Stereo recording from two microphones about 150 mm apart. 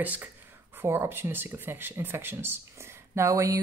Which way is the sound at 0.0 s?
10° right (ahead or behind).